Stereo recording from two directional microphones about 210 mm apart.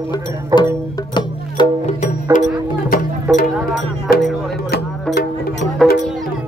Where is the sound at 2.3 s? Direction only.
35° left (ahead or behind).